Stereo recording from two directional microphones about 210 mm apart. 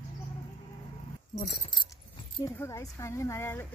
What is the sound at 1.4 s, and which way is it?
Speech, 20° left (ahead or behind).